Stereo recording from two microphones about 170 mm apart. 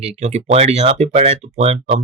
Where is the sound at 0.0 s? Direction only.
40° right (ahead or behind).